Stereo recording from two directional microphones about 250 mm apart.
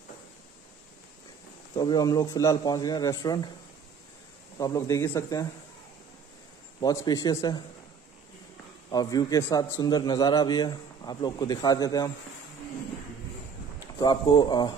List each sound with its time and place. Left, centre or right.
1.8 s a man's voice: centre
4.6 s a man's voice: centre
6.8 s a man's voice: centre
8.9 s a man's voice: centre
13.9 s a man's voice: centre